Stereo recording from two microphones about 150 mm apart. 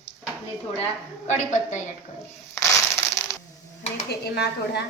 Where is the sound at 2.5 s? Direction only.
20° left (ahead or behind).